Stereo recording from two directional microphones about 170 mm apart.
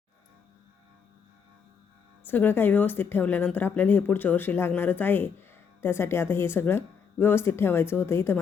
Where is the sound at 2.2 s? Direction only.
10° left (ahead or behind).